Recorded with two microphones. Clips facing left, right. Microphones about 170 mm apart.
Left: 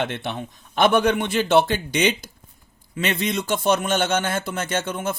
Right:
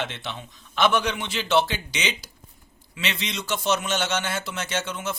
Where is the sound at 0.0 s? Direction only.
55° left (ahead or behind).